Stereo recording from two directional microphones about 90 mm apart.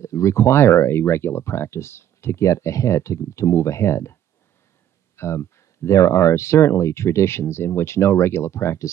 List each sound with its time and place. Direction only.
0.0 s speech: 35° left (ahead or behind)